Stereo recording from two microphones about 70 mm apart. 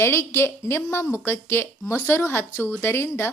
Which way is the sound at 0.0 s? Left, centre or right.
Left.